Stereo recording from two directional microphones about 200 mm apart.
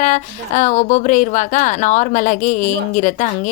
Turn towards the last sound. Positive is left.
turn(degrees=40)  # may be behind; listen again after turning